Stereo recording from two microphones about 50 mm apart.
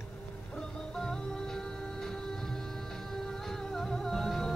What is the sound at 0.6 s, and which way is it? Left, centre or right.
Music, centre.